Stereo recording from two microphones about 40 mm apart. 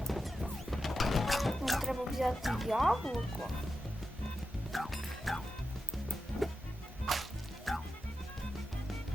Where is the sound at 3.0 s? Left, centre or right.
Centre.